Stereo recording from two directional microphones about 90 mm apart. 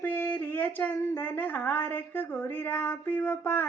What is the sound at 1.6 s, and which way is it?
Speech, 25° left (ahead or behind).